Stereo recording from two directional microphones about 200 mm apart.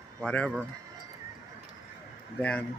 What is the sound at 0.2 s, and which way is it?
Speech, 5° left (ahead or behind).